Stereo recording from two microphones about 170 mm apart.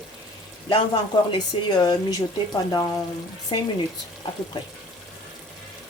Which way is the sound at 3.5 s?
25° left (ahead or behind).